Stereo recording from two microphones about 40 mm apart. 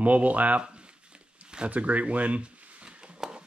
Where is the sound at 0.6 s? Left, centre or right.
Right.